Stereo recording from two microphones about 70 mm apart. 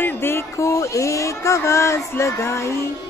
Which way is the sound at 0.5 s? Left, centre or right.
Left.